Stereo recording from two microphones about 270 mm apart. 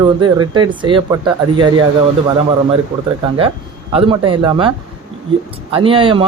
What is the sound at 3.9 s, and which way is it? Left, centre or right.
Speech, centre.